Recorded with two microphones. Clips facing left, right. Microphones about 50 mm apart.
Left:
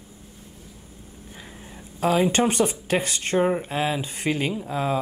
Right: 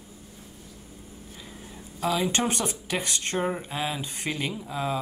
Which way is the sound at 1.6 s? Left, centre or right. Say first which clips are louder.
Left 5 dB; centre.